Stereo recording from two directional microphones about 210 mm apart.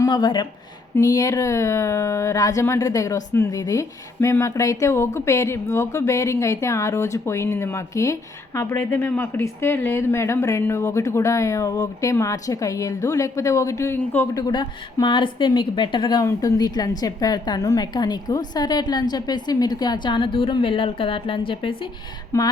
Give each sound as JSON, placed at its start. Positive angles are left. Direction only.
{"t": 0.0, "sound": "speech", "side_deg": 20}
{"t": 22.3, "sound": "speech", "side_deg": 15}